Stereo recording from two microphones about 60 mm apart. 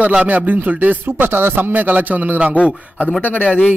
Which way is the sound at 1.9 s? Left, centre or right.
Right.